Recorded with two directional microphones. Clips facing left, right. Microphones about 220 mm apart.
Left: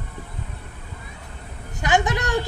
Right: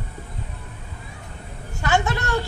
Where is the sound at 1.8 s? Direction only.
15° left (ahead or behind).